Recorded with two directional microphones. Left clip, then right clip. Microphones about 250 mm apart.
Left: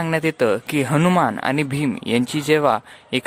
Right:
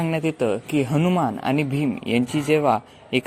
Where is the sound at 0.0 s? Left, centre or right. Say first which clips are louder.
Left 4 dB; left.